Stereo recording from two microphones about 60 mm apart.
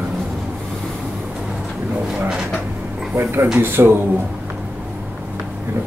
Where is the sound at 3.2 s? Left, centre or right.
Right.